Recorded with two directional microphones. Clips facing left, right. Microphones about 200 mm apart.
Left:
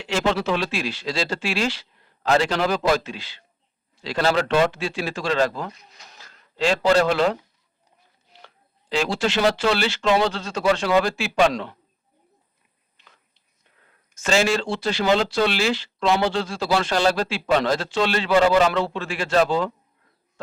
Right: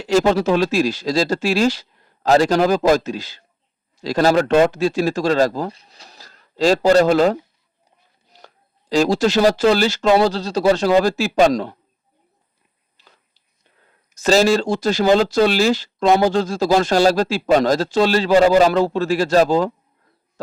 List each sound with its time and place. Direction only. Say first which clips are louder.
0.0 s a man's voice: right 7 dB; 40° right (ahead or behind)
13.0 s a sound: right 3 dB; 35° right (ahead or behind)
14.2 s speech: right 6 dB; 35° right (ahead or behind)